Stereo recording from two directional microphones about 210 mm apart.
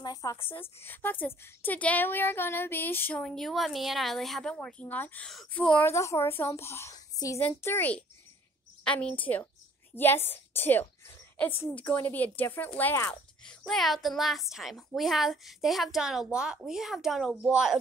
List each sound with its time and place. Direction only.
0.0 s a woman's voice: 15° left (ahead or behind); by 17.7 s 5° right (ahead or behind)